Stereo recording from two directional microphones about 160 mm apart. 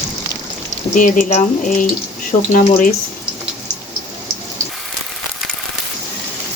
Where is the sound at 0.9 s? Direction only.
55° left (ahead or behind).